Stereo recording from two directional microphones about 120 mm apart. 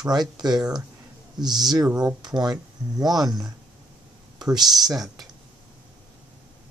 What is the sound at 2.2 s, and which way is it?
Speech, 35° right (ahead or behind).